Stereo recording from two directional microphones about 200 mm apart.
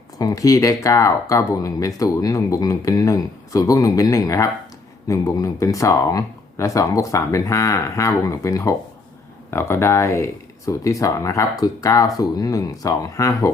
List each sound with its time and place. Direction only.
0.2 s speech: 15° left (ahead or behind)